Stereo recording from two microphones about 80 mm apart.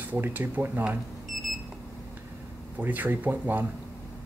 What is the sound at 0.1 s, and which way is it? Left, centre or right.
Speech, right.